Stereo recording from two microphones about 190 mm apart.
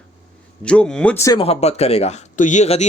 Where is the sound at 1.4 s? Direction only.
35° left (ahead or behind).